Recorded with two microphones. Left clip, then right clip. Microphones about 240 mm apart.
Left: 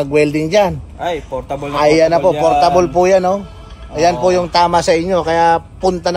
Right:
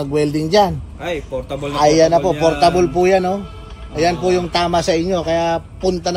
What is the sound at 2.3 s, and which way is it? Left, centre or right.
Speech, left.